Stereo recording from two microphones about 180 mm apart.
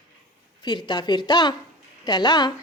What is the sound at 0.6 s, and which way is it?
A woman's voice, 25° left (ahead or behind).